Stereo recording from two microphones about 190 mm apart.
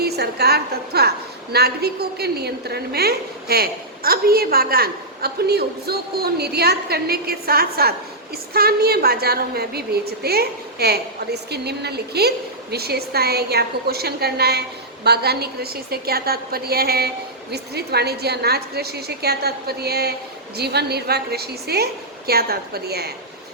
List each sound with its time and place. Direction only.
0.0 s a woman's voice: 55° right (ahead or behind)